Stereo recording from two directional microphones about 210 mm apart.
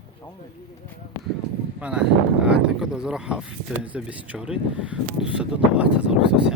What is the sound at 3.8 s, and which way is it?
Speech, 5° right (ahead or behind).